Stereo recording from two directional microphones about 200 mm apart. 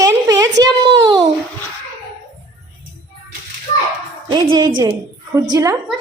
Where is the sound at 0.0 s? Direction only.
20° right (ahead or behind).